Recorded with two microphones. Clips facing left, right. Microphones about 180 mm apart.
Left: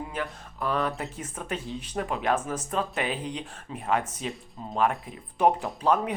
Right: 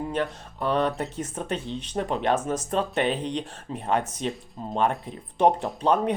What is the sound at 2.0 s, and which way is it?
Speech, 30° right (ahead or behind).